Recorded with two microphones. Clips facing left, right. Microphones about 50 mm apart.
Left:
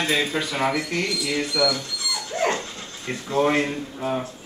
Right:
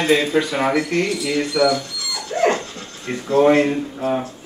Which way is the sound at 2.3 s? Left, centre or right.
Right.